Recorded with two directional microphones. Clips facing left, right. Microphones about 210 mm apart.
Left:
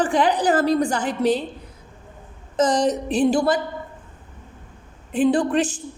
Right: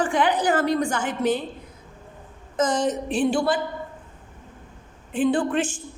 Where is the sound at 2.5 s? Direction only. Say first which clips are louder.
Left 3 dB; 35° left (ahead or behind).